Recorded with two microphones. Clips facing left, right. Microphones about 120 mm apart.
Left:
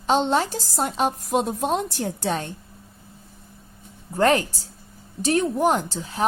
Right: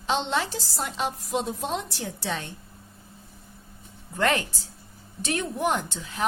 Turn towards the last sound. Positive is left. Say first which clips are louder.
# left 4 dB
turn(degrees=35)  # may be behind; listen again after turning